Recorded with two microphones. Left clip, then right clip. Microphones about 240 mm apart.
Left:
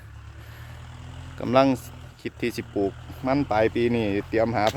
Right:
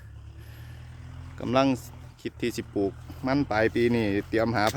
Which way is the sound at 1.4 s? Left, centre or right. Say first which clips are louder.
Left 4 dB; centre.